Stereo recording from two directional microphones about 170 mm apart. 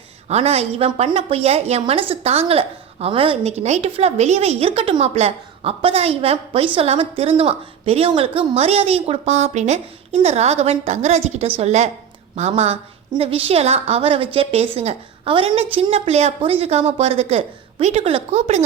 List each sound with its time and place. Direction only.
0.3 s a woman's voice: 40° right (ahead or behind)